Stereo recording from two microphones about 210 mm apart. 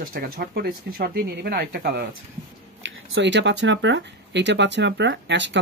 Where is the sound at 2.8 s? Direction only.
55° right (ahead or behind).